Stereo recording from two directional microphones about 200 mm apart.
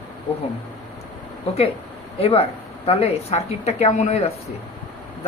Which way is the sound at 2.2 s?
30° left (ahead or behind).